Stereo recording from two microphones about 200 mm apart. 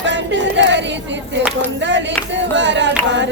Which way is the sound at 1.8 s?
60° right (ahead or behind).